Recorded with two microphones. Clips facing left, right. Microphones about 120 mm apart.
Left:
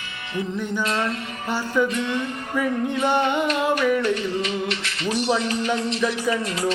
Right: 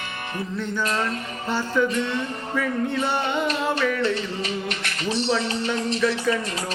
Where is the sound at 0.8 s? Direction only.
40° right (ahead or behind).